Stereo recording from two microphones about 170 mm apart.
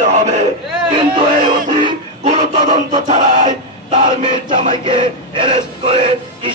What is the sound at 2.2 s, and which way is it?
Chant, 40° right (ahead or behind).